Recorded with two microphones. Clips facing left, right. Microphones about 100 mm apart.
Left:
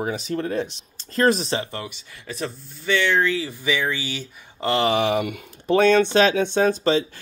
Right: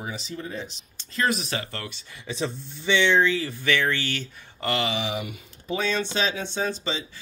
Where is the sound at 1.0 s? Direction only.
40° left (ahead or behind).